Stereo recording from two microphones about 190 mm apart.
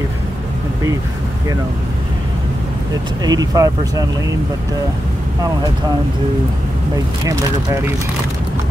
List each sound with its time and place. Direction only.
3.3 s speech: 20° right (ahead or behind)
7.2 s speech: 15° right (ahead or behind)